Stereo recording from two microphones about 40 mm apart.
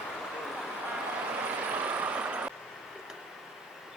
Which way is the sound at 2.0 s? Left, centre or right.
Right.